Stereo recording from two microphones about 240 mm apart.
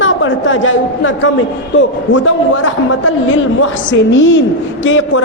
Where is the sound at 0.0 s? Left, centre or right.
Left.